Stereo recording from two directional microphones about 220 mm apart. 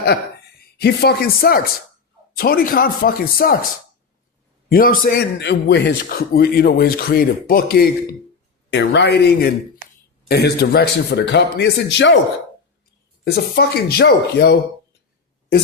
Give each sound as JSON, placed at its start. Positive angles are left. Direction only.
{"t": 0.8, "sound": "a man's voice", "side_deg": 45}
{"t": 4.7, "sound": "a man's voice", "side_deg": 40}
{"t": 13.2, "sound": "a man's voice", "side_deg": 45}